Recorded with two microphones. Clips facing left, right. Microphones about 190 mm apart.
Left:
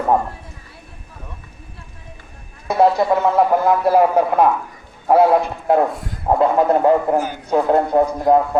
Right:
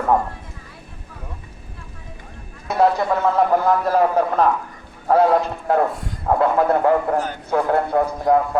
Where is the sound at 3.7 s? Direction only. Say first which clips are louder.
Left 3 dB; 10° left (ahead or behind).